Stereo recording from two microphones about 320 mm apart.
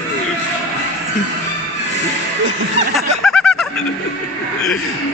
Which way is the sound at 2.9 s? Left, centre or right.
Centre.